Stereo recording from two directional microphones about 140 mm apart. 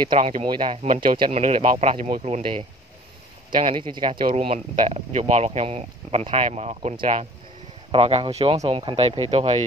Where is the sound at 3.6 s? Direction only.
35° right (ahead or behind).